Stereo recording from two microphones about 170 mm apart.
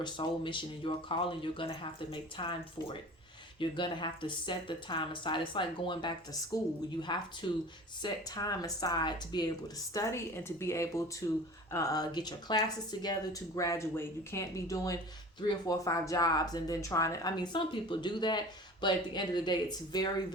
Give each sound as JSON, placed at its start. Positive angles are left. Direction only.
{"t": 0.0, "sound": "speech", "side_deg": 30}